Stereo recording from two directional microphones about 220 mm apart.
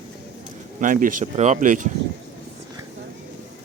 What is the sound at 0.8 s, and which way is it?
Speech, 35° right (ahead or behind).